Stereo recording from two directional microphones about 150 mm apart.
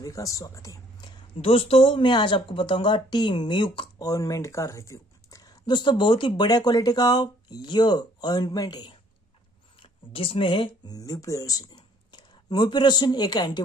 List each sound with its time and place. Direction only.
0.0 s speech: 20° left (ahead or behind)
1.4 s speech: 40° left (ahead or behind)
4.1 s speech: 20° left (ahead or behind)
9.8 s speech: 40° left (ahead or behind)
11.0 s speech: 25° left (ahead or behind)